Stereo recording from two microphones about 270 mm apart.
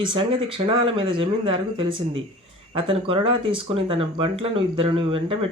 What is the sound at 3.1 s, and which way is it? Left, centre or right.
Speech, centre.